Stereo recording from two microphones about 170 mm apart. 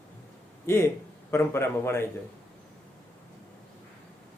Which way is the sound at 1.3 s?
15° left (ahead or behind).